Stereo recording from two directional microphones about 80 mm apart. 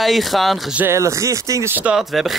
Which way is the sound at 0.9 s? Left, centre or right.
Right.